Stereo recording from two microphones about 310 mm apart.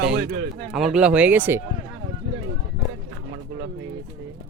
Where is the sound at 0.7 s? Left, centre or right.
Centre.